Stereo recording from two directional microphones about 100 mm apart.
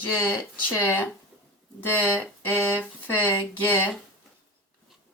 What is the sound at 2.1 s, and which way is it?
Speech, 20° left (ahead or behind).